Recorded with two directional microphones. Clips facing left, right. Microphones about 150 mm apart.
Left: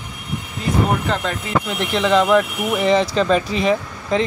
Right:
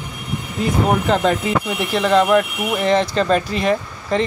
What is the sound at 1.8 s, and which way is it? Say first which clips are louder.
Speech: right 1 dB; 5° right (ahead or behind).